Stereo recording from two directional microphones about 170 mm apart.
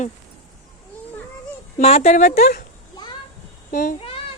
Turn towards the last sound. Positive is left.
turn(degrees=35)  # may be behind; listen again after turning